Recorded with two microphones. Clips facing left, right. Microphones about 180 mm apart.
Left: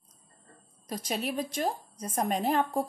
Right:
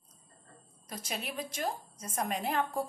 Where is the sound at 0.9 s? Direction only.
35° left (ahead or behind).